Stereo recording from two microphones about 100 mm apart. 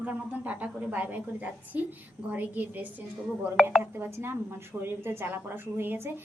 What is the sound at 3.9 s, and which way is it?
A woman's voice, 25° right (ahead or behind).